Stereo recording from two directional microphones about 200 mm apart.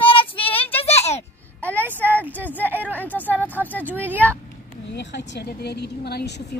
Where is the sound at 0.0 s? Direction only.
25° left (ahead or behind).